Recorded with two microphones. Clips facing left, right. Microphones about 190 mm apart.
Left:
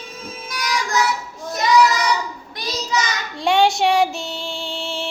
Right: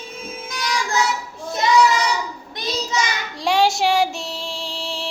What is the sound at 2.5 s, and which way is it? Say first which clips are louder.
Child singing: even; 25° right (ahead or behind).